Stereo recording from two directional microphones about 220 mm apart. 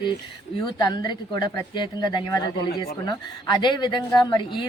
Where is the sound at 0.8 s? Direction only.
20° left (ahead or behind).